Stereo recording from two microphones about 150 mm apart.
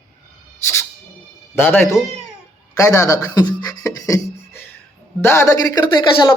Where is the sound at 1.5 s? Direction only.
15° left (ahead or behind).